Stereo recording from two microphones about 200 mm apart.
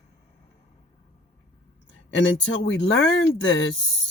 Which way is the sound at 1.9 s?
70° left (ahead or behind).